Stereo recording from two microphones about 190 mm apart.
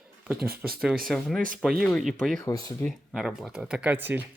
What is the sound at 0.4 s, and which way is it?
Speech, 50° right (ahead or behind).